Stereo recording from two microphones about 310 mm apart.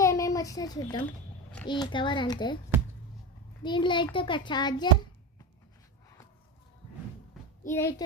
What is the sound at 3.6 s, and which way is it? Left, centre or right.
A child's voice, centre.